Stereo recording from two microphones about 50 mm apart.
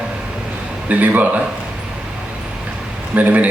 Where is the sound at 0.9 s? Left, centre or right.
Right.